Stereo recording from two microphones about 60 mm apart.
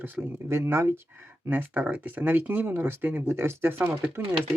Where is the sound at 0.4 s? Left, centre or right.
Right.